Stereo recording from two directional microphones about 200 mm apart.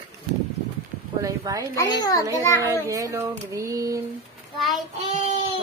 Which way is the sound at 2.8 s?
15° right (ahead or behind).